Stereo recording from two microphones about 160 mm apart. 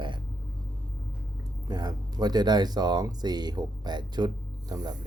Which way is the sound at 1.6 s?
25° right (ahead or behind).